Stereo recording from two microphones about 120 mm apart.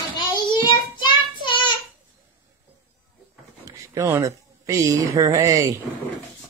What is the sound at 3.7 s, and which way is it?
Speech, 25° right (ahead or behind).